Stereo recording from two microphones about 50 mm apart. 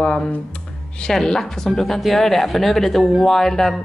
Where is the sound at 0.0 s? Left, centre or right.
Centre.